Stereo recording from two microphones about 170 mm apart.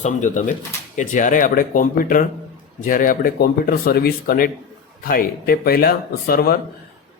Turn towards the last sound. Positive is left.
turn(degrees=65)  # may be behind; listen again after turning